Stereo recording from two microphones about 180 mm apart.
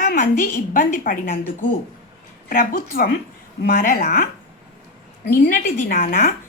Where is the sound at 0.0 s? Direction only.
50° left (ahead or behind).